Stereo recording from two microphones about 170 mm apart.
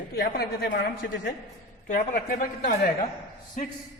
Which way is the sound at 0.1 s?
65° left (ahead or behind).